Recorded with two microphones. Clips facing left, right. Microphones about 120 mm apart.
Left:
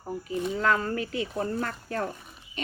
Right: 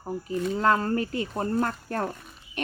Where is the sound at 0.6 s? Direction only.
35° right (ahead or behind).